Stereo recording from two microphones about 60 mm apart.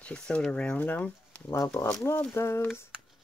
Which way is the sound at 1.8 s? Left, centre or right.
Left.